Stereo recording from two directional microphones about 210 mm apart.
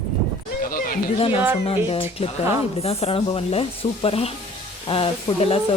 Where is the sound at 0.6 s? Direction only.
40° left (ahead or behind).